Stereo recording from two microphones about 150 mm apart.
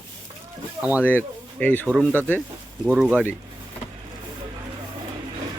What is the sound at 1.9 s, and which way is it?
Speech, 10° right (ahead or behind).